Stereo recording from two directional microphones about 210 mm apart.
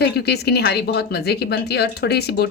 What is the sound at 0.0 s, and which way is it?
A woman's voice, 50° left (ahead or behind).